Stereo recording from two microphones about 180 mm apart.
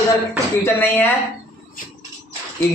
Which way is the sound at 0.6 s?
10° left (ahead or behind).